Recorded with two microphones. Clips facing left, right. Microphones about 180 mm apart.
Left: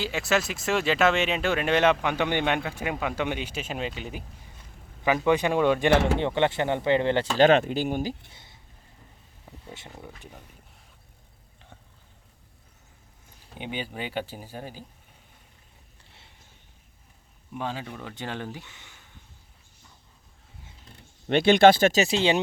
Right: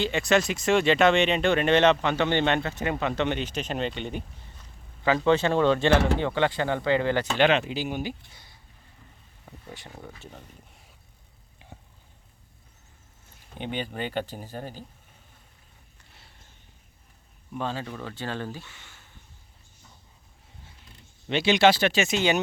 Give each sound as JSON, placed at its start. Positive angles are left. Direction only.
{"t": 0.0, "sound": "speech", "side_deg": 5}
{"t": 5.0, "sound": "speech", "side_deg": 15}
{"t": 7.3, "sound": "speech", "side_deg": 45}
{"t": 8.3, "sound": "a sound", "side_deg": 25}
{"t": 10.0, "sound": "speech", "side_deg": 10}
{"t": 11.6, "sound": "a sound", "side_deg": -10}
{"t": 13.6, "sound": "speech", "side_deg": 5}
{"t": 17.5, "sound": "speech", "side_deg": 15}
{"t": 21.2, "sound": "speech", "side_deg": 55}